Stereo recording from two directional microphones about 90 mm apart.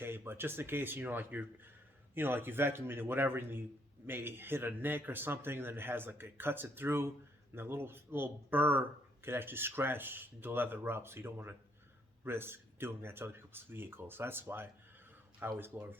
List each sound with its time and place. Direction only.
0.0 s speech: 25° right (ahead or behind)